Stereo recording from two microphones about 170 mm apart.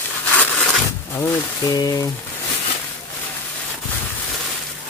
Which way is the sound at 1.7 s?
20° left (ahead or behind).